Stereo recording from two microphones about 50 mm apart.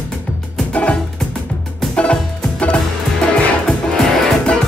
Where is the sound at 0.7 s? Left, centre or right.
Left.